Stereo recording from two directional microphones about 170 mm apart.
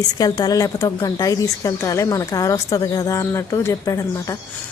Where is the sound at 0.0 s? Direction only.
25° left (ahead or behind).